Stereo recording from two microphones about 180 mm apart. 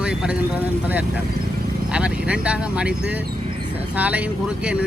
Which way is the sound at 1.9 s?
5° right (ahead or behind).